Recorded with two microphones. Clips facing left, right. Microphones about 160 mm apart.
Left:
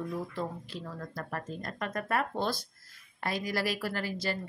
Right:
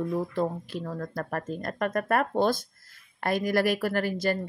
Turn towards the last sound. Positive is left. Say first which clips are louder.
# right 7 dB
turn(degrees=-50)  # may be behind; listen again after turning